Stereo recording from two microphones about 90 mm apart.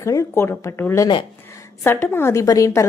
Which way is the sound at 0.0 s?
35° left (ahead or behind).